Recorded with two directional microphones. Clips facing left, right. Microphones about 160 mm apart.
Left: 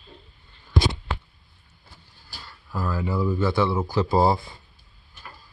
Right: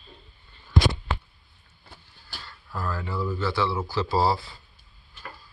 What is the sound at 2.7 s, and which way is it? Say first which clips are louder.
Speech: left 4 dB; 10° left (ahead or behind).